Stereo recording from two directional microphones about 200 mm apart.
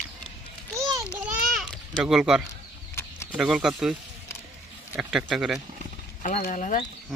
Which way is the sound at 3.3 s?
5° right (ahead or behind).